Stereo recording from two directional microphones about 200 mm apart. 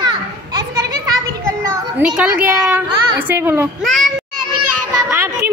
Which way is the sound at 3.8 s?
Centre (ahead or behind).